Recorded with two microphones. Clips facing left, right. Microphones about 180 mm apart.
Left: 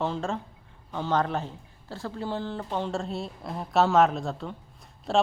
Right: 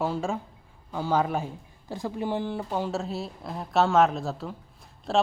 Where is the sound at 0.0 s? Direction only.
10° right (ahead or behind).